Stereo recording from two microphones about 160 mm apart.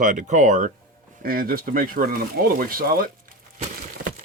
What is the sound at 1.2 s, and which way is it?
Speech, 65° right (ahead or behind).